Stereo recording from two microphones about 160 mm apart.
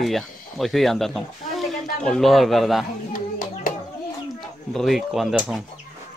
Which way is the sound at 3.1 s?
60° left (ahead or behind).